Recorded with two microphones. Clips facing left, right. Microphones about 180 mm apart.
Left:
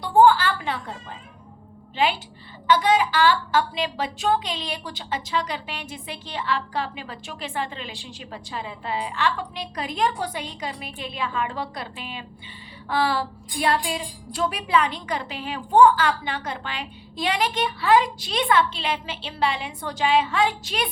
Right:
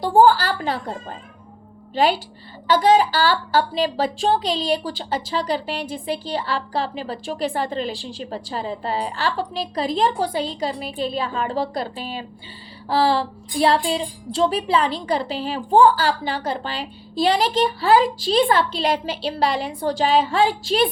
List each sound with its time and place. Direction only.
0.0 s speech: 35° right (ahead or behind)